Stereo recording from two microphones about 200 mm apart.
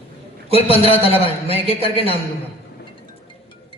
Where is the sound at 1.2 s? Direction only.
30° left (ahead or behind).